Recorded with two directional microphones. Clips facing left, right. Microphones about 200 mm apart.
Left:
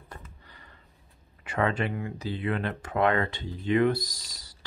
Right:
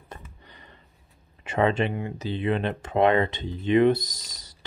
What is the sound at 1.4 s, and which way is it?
Speech, 25° right (ahead or behind).